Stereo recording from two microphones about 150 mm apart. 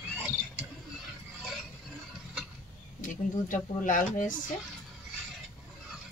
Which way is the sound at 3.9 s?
60° left (ahead or behind).